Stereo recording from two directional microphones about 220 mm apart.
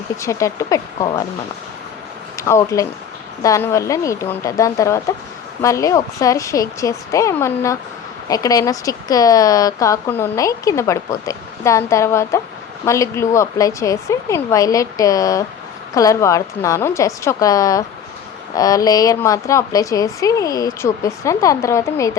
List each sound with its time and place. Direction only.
0.2 s speech: 15° left (ahead or behind)
2.4 s speech: 15° left (ahead or behind)